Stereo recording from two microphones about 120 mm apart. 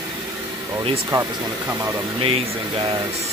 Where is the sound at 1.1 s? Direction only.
35° right (ahead or behind).